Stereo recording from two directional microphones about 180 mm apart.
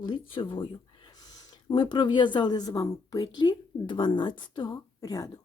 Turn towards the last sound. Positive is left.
turn(degrees=20)  # may be behind; listen again after turning